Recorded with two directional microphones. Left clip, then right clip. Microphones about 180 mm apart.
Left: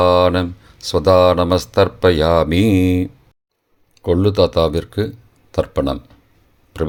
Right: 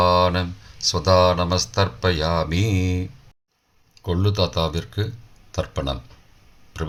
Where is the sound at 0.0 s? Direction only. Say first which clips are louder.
Left 5 dB; 50° left (ahead or behind).